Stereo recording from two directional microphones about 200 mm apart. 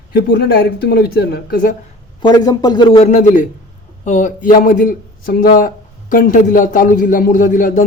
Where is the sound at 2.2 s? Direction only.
20° left (ahead or behind).